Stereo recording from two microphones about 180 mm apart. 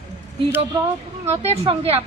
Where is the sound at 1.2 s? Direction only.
35° right (ahead or behind).